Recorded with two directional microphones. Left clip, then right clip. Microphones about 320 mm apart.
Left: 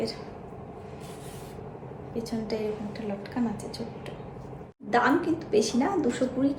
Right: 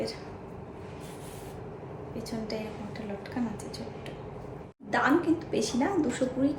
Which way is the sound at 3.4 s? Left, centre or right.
Centre.